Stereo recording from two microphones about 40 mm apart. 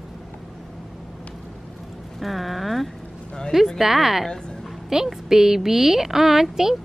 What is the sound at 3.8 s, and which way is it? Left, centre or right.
A woman's voice, centre.